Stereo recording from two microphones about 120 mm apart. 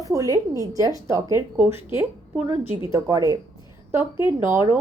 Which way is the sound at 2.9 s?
25° right (ahead or behind).